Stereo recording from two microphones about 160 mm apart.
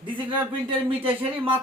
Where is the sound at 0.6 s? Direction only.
35° right (ahead or behind).